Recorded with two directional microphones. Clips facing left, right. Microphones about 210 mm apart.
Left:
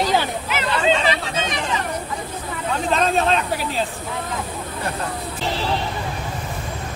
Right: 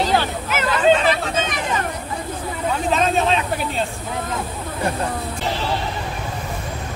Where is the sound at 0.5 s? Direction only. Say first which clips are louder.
Right 5 dB; 50° right (ahead or behind).